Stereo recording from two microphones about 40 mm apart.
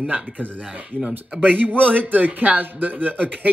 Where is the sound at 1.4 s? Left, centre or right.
Right.